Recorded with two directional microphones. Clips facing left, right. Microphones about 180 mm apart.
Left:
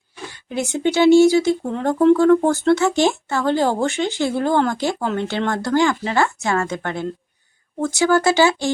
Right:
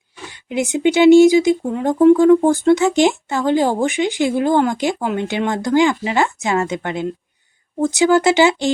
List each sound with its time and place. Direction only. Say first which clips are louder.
0.3 s speech: right 4 dB; 15° right (ahead or behind)